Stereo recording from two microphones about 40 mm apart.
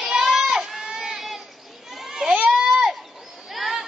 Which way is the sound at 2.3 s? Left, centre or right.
Right.